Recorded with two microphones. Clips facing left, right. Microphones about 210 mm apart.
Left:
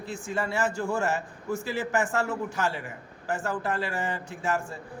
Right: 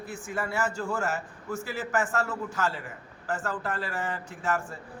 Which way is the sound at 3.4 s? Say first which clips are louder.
Left 6 dB; 25° left (ahead or behind).